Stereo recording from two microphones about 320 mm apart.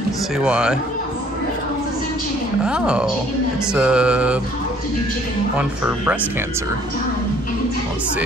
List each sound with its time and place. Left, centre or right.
0.4 s mantra: centre
2.6 s mantra: centre
5.6 s mantra: centre